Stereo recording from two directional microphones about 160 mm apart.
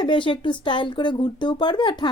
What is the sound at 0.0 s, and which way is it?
A woman's voice, 30° left (ahead or behind).